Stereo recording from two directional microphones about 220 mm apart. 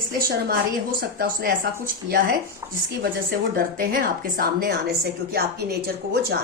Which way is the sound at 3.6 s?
40° right (ahead or behind).